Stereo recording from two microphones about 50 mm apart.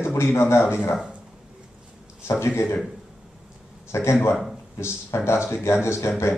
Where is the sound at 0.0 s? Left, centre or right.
Left.